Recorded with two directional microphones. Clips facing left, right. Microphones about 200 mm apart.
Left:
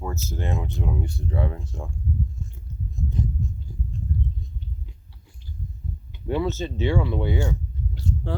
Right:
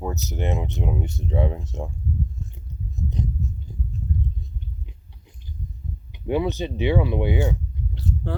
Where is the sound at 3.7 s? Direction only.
20° right (ahead or behind).